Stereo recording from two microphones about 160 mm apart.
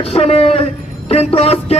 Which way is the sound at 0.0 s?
40° left (ahead or behind).